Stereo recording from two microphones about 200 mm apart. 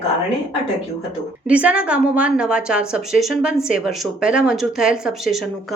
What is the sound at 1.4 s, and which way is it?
A woman's voice, 5° right (ahead or behind).